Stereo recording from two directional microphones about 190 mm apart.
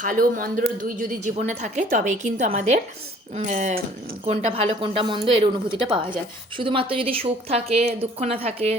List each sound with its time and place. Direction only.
0.0 s a woman's voice: 45° right (ahead or behind)